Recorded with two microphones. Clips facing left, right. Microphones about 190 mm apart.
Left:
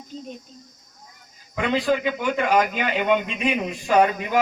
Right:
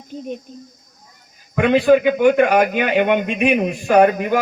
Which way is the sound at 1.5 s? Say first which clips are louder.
Right 9 dB; 65° right (ahead or behind).